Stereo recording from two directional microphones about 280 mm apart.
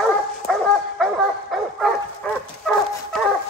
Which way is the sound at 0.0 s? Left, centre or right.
Centre.